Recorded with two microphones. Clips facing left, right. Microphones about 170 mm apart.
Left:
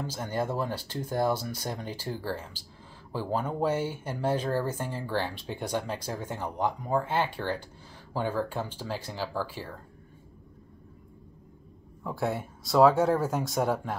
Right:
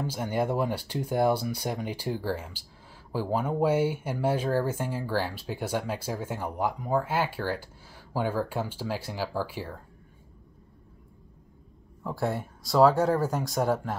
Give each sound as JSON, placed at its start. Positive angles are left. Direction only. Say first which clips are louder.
{"t": 0.0, "sound": "speech", "louder": "right 3 dB", "side_deg": -10}
{"t": 12.0, "sound": "speech", "louder": "right 1 dB", "side_deg": 0}